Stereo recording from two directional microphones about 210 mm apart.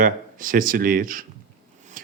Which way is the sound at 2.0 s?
40° right (ahead or behind).